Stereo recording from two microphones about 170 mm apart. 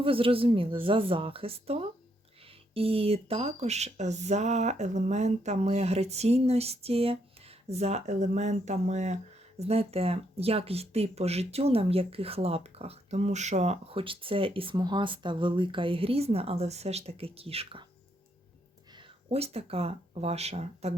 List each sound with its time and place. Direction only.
0.0 s speech: 30° right (ahead or behind)
18.9 s speech: 30° right (ahead or behind)